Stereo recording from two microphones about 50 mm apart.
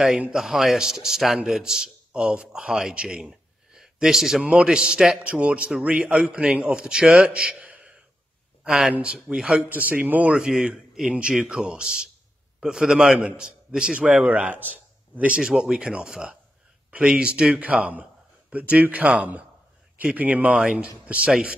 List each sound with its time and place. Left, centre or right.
0.3 s a man's voice: centre
4.4 s a man's voice: centre
5.2 s a man's voice: right
8.6 s a man's voice: centre
9.7 s a man's voice: right
10.6 s a man's voice: centre
14.2 s a man's voice: right